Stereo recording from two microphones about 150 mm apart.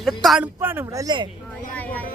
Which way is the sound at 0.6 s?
15° right (ahead or behind).